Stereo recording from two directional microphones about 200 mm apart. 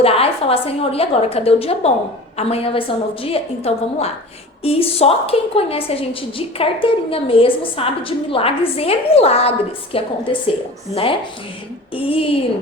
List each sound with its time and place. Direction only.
0.0 s a woman's voice: 30° left (ahead or behind)